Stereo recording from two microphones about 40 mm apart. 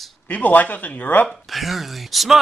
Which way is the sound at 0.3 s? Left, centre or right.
Left.